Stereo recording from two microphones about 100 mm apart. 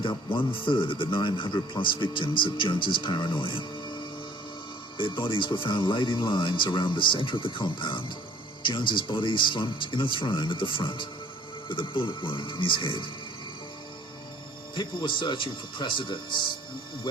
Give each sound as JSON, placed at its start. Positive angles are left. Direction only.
{"t": 0.3, "sound": "speech", "side_deg": 60}
{"t": 4.9, "sound": "speech", "side_deg": 60}
{"t": 14.8, "sound": "speech", "side_deg": 55}